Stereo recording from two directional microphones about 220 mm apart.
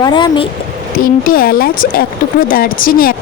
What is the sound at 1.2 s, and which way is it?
Speech, 40° left (ahead or behind).